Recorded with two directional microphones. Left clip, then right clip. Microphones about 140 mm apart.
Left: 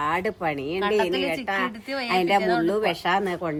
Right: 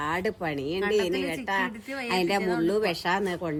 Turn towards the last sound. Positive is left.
turn(degrees=0)  # may be behind; listen again after turning